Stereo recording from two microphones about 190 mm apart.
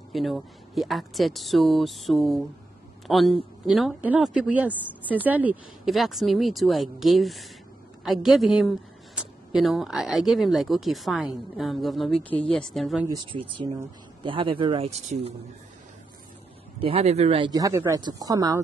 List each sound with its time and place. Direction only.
0.1 s a woman's voice: centre (ahead or behind)
13.0 s speech: 20° right (ahead or behind)
16.8 s speech: 35° right (ahead or behind)
17.5 s speech: 20° right (ahead or behind)